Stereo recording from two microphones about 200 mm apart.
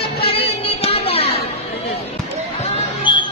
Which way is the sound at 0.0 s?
30° left (ahead or behind).